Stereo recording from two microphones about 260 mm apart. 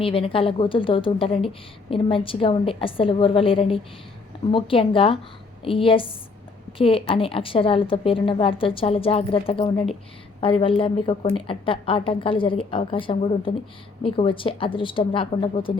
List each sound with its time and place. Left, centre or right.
0.0 s a woman's voice: left